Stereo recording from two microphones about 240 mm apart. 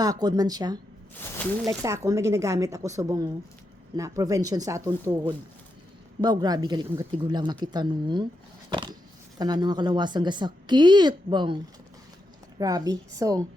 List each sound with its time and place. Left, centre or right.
0.0 s speech: centre
1.2 s speech: centre
1.6 s speech: centre
8.7 s a sound: centre
9.4 s a woman's voice: centre
12.5 s speech: centre